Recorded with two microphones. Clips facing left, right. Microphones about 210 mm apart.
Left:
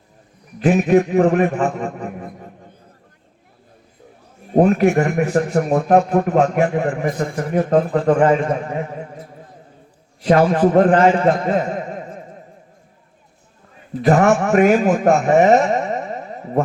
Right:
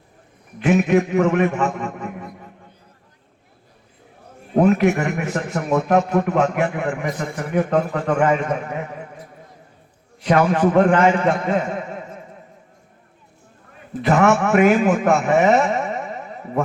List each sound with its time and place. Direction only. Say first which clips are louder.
0.6 s a man's voice: left 2 dB; 35° left (ahead or behind)
4.6 s a man's voice: left 2 dB; 35° left (ahead or behind)
10.2 s a man's voice: left 3 dB; 35° left (ahead or behind)
14.0 s a man's voice: left 2 dB; 35° left (ahead or behind)